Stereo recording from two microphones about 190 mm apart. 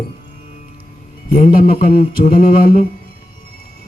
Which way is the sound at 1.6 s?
50° left (ahead or behind).